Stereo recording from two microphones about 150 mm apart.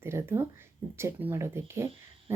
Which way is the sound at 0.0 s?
15° right (ahead or behind).